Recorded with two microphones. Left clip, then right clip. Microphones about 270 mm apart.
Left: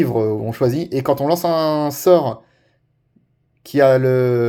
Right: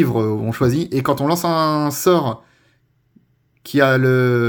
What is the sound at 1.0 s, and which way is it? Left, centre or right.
Speech, right.